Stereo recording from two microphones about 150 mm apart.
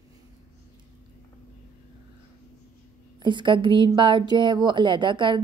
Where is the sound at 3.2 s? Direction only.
30° right (ahead or behind).